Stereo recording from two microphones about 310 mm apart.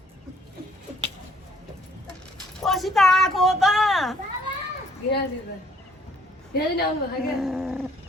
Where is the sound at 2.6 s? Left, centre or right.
Centre.